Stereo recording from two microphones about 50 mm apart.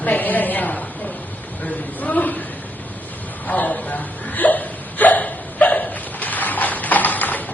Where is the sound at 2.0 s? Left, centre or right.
Left.